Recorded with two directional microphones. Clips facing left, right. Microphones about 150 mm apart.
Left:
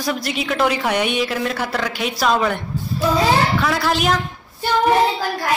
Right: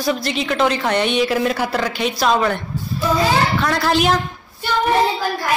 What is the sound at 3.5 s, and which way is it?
Speech, 5° left (ahead or behind).